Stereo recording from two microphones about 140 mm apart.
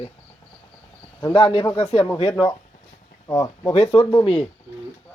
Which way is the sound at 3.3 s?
20° left (ahead or behind).